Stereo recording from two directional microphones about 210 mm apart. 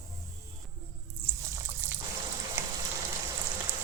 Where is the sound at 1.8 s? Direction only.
10° right (ahead or behind).